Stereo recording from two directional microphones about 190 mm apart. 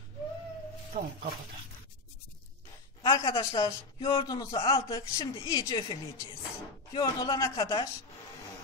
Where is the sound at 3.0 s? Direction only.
25° left (ahead or behind).